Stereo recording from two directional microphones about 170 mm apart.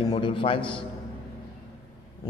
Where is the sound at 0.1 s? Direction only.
30° left (ahead or behind).